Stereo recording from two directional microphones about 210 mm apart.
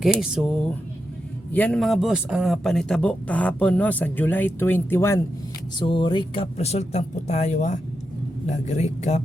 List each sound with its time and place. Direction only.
0.0 s speech: centre (ahead or behind); by 9.2 s 35° left (ahead or behind)